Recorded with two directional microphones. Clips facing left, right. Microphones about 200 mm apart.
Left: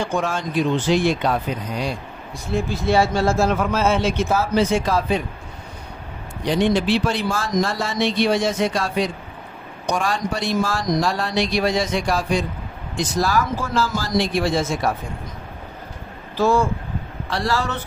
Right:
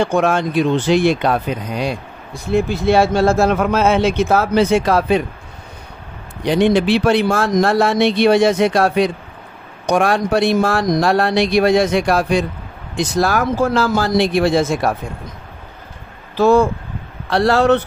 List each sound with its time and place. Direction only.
0.0 s a man's voice: 65° right (ahead or behind)
6.4 s a man's voice: 65° right (ahead or behind)
16.3 s a man's voice: 60° right (ahead or behind)